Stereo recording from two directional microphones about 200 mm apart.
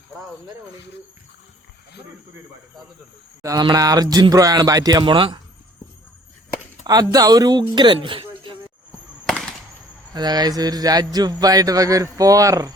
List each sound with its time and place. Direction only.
3.4 s speech: 20° right (ahead or behind)
6.8 s speech: 20° right (ahead or behind)
8.0 s a sound: 25° right (ahead or behind)
9.2 s fireworks: centre (ahead or behind)
10.2 s speech: 20° right (ahead or behind)